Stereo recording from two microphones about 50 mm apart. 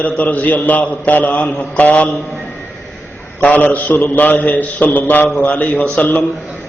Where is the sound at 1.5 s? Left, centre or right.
Left.